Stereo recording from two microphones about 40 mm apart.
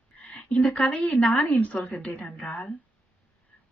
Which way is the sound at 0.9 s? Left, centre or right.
Left.